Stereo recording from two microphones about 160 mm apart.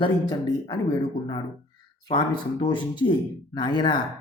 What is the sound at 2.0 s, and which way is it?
Speech, 25° left (ahead or behind).